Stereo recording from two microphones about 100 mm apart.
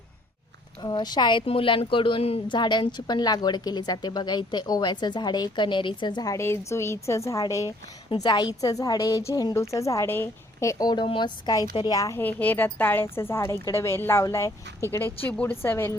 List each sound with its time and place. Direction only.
0.8 s speech: 45° left (ahead or behind); by 2.4 s 70° left (ahead or behind)
2.5 s a woman's voice: 50° left (ahead or behind)
6.3 s a woman's voice: 25° left (ahead or behind)
8.1 s a woman's voice: 50° left (ahead or behind)
11.0 s a woman's voice: 55° left (ahead or behind); by 12.2 s 35° left (ahead or behind)
12.2 s a woman's voice: 20° left (ahead or behind)
15.3 s a woman's voice: 15° left (ahead or behind)